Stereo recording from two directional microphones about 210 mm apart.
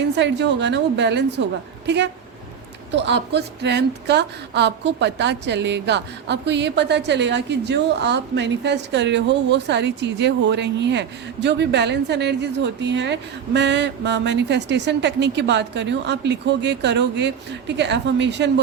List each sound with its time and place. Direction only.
0.2 s a woman's voice: 55° right (ahead or behind)